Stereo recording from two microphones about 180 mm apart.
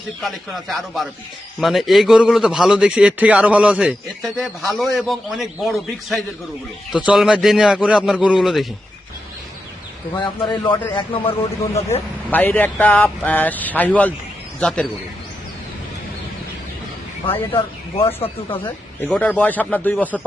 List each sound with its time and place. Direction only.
0.2 s a man's voice: centre (ahead or behind)
10.4 s a man's voice: 25° left (ahead or behind)
11.9 s speech: 10° left (ahead or behind)
17.5 s speech: 30° left (ahead or behind)
19.0 s speech: 5° left (ahead or behind)